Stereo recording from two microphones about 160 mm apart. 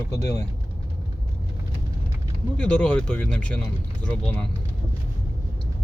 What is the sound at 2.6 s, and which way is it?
Speech, 5° left (ahead or behind).